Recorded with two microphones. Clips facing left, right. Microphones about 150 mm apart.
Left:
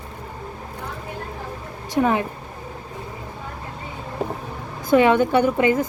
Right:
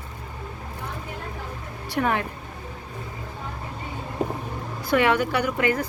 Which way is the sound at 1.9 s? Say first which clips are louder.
Left 5 dB; 20° left (ahead or behind).